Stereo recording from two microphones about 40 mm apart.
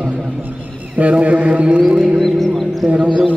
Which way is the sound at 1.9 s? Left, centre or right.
Centre.